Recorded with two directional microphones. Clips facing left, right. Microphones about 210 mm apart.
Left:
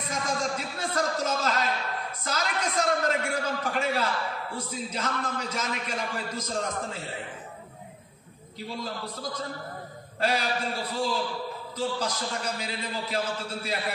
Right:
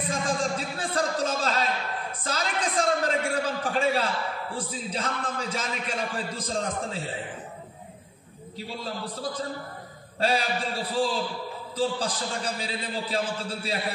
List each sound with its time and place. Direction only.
0.1 s music: 30° right (ahead or behind)
2.2 s a sound: 30° right (ahead or behind)
4.6 s a man's voice: 30° right (ahead or behind)
8.8 s a man's voice: 30° right (ahead or behind)